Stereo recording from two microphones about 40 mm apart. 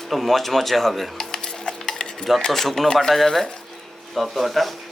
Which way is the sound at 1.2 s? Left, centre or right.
Centre.